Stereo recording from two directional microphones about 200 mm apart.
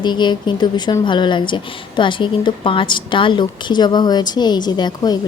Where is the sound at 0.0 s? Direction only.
20° left (ahead or behind).